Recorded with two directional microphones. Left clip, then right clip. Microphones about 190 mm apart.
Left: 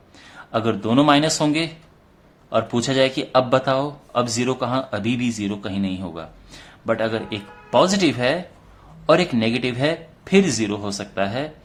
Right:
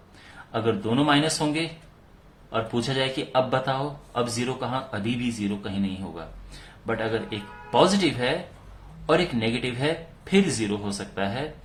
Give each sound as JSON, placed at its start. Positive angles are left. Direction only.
{"t": 0.5, "sound": "speech", "side_deg": 35}